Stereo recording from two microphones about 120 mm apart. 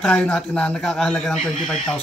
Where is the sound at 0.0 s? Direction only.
5° left (ahead or behind).